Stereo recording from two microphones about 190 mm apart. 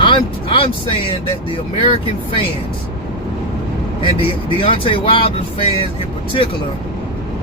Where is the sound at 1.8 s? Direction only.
30° left (ahead or behind).